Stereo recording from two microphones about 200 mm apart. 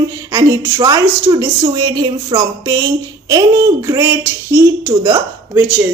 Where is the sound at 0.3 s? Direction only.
15° right (ahead or behind).